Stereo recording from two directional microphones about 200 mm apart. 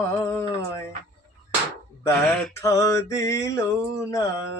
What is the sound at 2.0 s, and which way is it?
Male singing, 10° left (ahead or behind).